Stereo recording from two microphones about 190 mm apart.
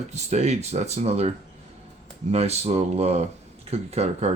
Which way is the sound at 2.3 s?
35° right (ahead or behind).